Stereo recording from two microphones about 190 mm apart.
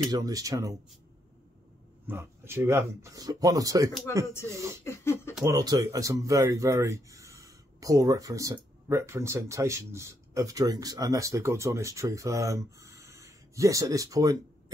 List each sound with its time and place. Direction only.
0.1 s speech: 20° right (ahead or behind)
2.0 s speech: 10° right (ahead or behind)
4.8 s speech: 15° left (ahead or behind)
5.4 s speech: 20° right (ahead or behind)